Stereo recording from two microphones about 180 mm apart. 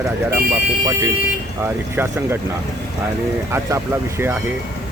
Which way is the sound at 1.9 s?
15° right (ahead or behind).